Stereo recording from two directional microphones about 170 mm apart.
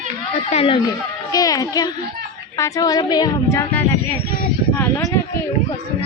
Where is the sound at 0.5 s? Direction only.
35° left (ahead or behind).